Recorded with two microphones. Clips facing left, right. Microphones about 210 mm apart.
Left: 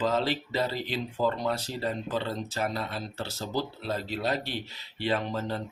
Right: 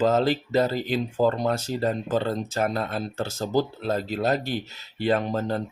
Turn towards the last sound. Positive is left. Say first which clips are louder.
# right 5 dB
turn(degrees=-45)  # may be behind; listen again after turning